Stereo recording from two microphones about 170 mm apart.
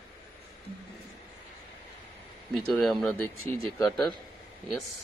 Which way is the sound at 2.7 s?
Centre (ahead or behind).